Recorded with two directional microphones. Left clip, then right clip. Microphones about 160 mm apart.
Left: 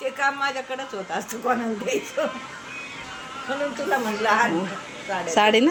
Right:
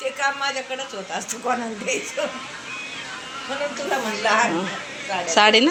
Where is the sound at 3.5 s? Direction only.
70° left (ahead or behind).